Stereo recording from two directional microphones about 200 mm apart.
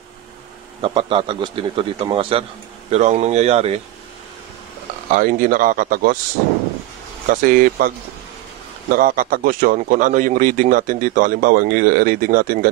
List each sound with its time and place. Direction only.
0.8 s a man's voice: 25° right (ahead or behind)
5.1 s speech: 45° right (ahead or behind)
7.2 s speech: 40° right (ahead or behind)
8.9 s speech: 45° right (ahead or behind)